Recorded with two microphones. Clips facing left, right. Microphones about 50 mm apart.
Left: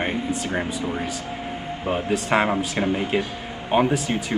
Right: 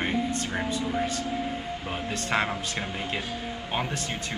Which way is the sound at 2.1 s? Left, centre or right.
Centre.